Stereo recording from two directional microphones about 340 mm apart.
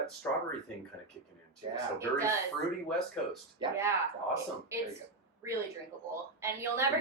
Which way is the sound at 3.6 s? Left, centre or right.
Centre.